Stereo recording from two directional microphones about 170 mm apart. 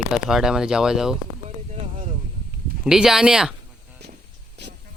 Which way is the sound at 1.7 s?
40° right (ahead or behind).